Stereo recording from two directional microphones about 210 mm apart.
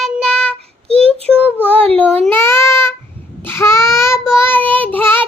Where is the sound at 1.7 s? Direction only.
25° right (ahead or behind).